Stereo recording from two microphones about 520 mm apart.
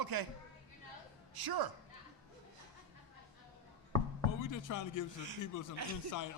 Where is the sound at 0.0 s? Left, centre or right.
Right.